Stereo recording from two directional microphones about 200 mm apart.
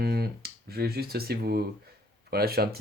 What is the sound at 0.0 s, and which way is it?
Speech, 50° right (ahead or behind).